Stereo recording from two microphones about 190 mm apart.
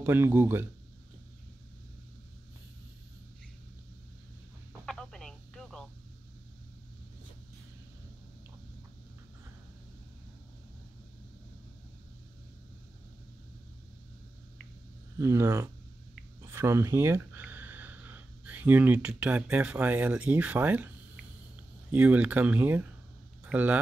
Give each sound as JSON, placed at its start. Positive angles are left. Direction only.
{"t": 0.0, "sound": "speech", "side_deg": -10}
{"t": 4.8, "sound": "telephone", "side_deg": 5}
{"t": 15.1, "sound": "speech", "side_deg": -15}
{"t": 21.9, "sound": "speech", "side_deg": -10}